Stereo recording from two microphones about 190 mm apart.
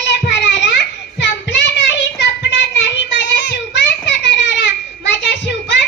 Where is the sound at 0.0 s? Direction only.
70° left (ahead or behind).